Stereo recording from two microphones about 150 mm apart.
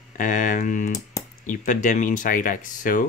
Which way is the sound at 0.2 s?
60° left (ahead or behind).